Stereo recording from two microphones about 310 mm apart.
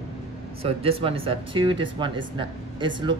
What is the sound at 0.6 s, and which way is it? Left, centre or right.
Speech, centre.